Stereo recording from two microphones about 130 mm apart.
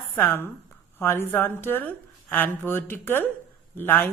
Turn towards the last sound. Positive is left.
turn(degrees=15)  # may be behind; listen again after turning